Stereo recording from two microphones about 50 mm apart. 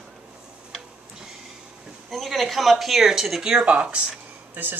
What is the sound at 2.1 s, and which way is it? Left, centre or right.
Speech, centre.